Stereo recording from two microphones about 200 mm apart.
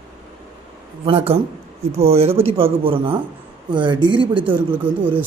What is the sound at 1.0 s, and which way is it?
Speech, 30° right (ahead or behind).